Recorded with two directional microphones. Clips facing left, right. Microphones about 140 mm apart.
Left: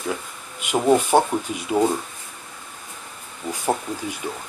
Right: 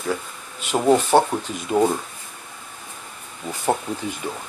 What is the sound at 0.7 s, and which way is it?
Speech, 5° left (ahead or behind).